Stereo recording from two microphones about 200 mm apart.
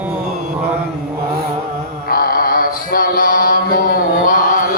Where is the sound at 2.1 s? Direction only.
45° left (ahead or behind).